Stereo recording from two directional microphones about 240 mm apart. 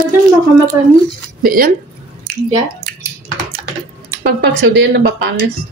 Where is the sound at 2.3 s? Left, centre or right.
Right.